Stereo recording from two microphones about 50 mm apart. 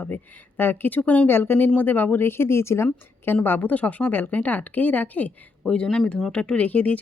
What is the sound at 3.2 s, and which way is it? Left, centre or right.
Speech, left.